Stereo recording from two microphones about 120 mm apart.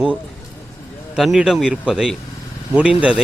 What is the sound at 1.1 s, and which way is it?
A man's voice, 5° right (ahead or behind).